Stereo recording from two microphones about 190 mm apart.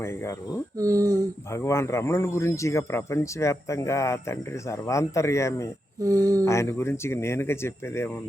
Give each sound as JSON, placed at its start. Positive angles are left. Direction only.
{"t": 0.8, "sound": "speech", "side_deg": -15}
{"t": 1.5, "sound": "speech", "side_deg": 15}
{"t": 6.0, "sound": "speech", "side_deg": -20}
{"t": 6.4, "sound": "speech", "side_deg": 15}